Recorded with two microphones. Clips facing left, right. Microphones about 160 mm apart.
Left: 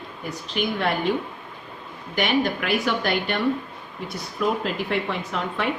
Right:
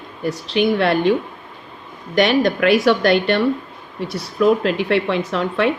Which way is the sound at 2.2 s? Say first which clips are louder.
Right 7 dB; 85° right.